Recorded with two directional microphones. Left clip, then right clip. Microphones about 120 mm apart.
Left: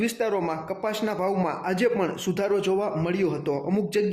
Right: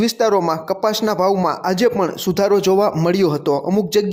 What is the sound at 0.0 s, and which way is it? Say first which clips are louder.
A man's voice: right 10 dB; 55° right (ahead or behind).